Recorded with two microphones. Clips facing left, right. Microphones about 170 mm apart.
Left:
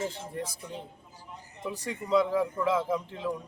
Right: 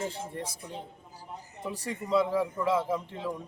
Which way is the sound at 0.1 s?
30° right (ahead or behind).